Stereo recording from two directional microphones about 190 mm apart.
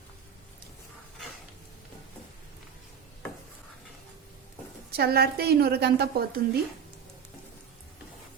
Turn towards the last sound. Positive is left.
turn(degrees=-55)  # may be behind; listen again after turning